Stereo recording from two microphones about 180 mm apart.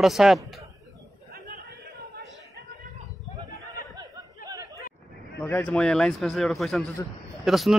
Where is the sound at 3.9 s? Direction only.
20° right (ahead or behind).